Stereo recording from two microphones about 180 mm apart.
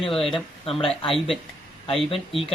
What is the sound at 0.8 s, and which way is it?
Speech, centre (ahead or behind).